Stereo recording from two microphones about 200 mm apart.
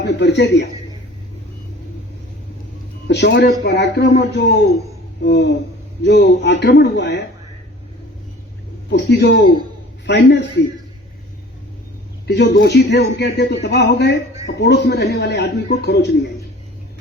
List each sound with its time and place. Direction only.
0.0 s a man's voice: 55° left (ahead or behind)
3.1 s a man's voice: 55° left (ahead or behind)
8.9 s a man's voice: 55° left (ahead or behind)
12.3 s a man's voice: 55° left (ahead or behind)